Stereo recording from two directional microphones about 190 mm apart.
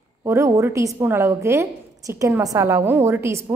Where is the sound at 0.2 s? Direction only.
15° right (ahead or behind).